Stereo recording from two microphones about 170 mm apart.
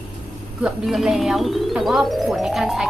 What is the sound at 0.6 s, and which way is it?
A woman's voice, centre (ahead or behind).